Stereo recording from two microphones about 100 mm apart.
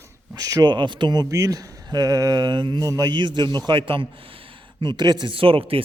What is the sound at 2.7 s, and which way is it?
Speech, 35° right (ahead or behind).